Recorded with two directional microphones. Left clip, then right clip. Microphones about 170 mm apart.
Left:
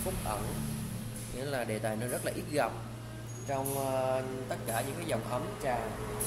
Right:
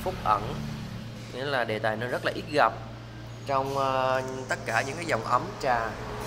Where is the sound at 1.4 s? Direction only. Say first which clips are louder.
Right 7 dB; 15° left (ahead or behind).